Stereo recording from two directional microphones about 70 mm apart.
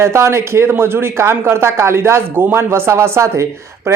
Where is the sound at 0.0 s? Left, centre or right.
Right.